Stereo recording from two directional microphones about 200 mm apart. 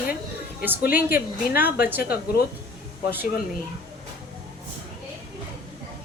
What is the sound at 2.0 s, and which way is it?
Speech, 50° left (ahead or behind).